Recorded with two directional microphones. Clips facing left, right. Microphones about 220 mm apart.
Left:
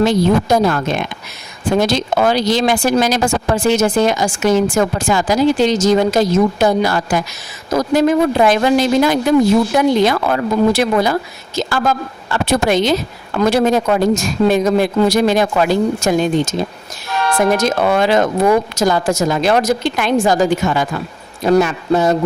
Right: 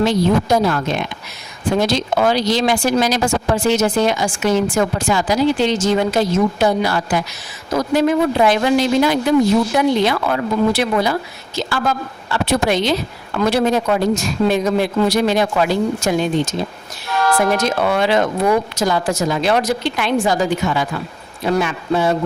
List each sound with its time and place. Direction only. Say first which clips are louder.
0.0 s a woman's voice: left 2 dB; 50° left (ahead or behind)
17.6 s a woman's voice: left 3 dB; 45° left (ahead or behind)